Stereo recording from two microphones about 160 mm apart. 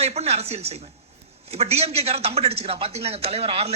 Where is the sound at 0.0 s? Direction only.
40° right (ahead or behind).